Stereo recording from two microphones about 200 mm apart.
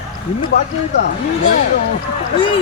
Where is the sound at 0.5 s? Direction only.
55° left (ahead or behind).